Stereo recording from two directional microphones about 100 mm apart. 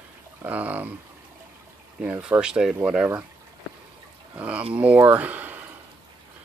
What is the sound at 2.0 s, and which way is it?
Speech, 10° right (ahead or behind).